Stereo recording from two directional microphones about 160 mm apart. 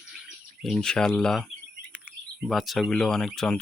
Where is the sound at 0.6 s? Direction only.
5° left (ahead or behind).